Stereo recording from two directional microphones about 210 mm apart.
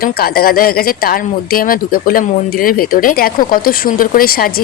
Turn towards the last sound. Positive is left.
turn(degrees=45)  # may be behind; listen again after turning